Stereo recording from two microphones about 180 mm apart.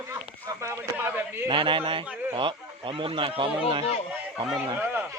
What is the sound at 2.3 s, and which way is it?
Speech, 30° right (ahead or behind).